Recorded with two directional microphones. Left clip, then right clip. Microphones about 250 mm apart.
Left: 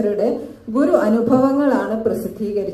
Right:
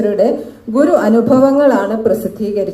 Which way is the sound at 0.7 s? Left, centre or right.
Right.